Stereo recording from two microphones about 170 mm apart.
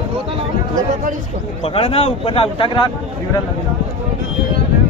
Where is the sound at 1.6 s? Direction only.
35° left (ahead or behind).